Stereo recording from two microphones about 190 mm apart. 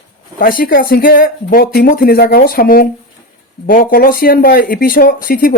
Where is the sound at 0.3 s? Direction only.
45° left (ahead or behind).